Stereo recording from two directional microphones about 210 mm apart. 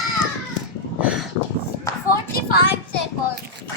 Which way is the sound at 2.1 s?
45° left (ahead or behind).